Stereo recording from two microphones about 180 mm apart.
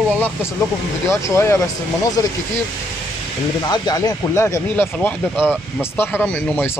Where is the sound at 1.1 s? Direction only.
15° left (ahead or behind).